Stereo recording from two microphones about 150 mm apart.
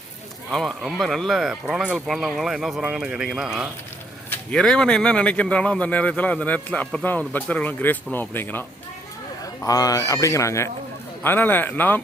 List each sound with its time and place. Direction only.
0.5 s speech: centre (ahead or behind)
9.6 s fowl: 25° left (ahead or behind)
11.2 s speech: 15° left (ahead or behind)